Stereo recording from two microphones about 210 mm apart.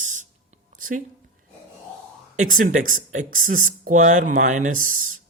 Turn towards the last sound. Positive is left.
turn(degrees=-40)  # may be behind; listen again after turning